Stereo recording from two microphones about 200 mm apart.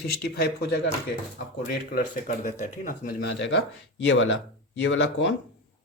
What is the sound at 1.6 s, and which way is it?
Speech, 45° left (ahead or behind).